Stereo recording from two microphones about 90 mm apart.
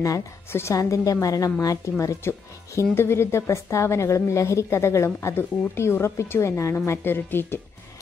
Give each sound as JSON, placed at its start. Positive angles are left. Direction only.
{"t": 0.0, "sound": "a woman's voice", "side_deg": 35}